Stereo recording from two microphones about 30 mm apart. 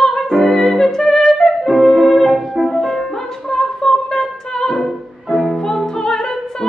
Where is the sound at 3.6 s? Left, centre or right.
Left.